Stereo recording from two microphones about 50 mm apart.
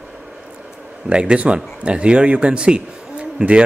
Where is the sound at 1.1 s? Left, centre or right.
Right.